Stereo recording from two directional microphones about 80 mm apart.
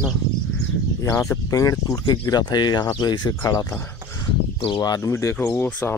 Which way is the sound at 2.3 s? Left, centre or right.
Left.